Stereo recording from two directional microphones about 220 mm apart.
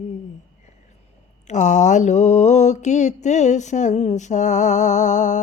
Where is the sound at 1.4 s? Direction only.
35° left (ahead or behind).